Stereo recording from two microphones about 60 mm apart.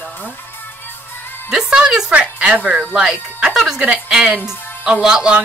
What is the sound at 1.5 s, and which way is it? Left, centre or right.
A woman's voice, centre.